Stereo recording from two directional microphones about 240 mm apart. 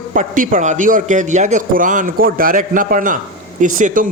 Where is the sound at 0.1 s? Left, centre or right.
Right.